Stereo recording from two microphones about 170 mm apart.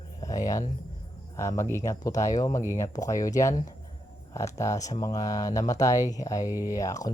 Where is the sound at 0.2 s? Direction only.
20° left (ahead or behind).